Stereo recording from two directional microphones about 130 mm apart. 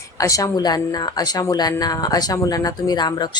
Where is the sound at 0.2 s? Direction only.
25° left (ahead or behind).